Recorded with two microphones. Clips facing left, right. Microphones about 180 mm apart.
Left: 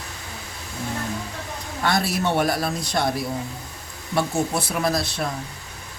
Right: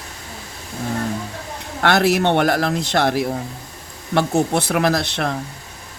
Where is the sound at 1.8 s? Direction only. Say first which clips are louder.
Right 7 dB; 70° right (ahead or behind).